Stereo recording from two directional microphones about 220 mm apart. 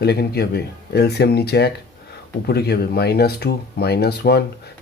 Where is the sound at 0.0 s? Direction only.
45° left (ahead or behind).